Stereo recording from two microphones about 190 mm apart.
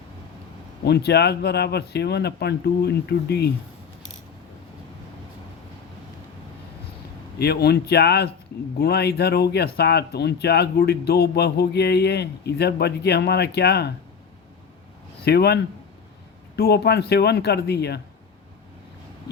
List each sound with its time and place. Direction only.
0.9 s speech: 60° left (ahead or behind)
7.3 s speech: 55° left (ahead or behind)
15.2 s speech: 60° left (ahead or behind)